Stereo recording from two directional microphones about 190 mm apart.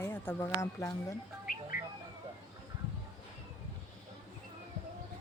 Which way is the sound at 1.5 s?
50° left (ahead or behind).